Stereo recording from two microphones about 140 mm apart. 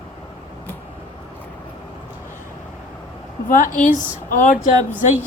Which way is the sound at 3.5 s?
70° left (ahead or behind).